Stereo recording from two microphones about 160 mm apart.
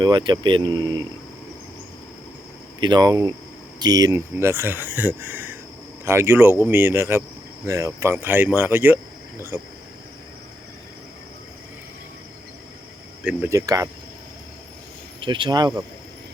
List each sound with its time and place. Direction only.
0.0 s speech: 30° right (ahead or behind)
2.8 s speech: 25° right (ahead or behind); by 9.7 s 10° right (ahead or behind)
13.2 s speech: 15° right (ahead or behind)
15.2 s speech: 30° right (ahead or behind)